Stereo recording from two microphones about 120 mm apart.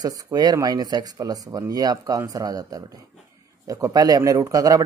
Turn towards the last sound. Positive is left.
turn(degrees=-30)  # may be behind; listen again after turning